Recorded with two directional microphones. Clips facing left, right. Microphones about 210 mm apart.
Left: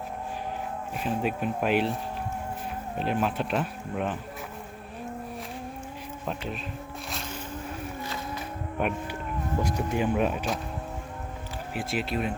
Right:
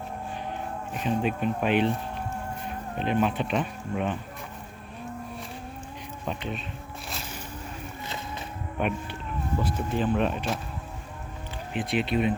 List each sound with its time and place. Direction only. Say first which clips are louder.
0.9 s speech: right 2 dB; 5° left (ahead or behind)
3.0 s speech: right 2 dB; 5° left (ahead or behind)
6.2 s speech: right 1 dB; centre (ahead or behind)
8.0 s a sound: left 2 dB; 25° right (ahead or behind)
8.8 s speech: even; 5° left (ahead or behind)
11.7 s speech: right 4 dB; 5° left (ahead or behind)